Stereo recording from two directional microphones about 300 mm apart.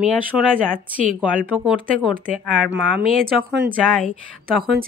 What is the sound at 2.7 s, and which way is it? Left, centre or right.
Speech, right.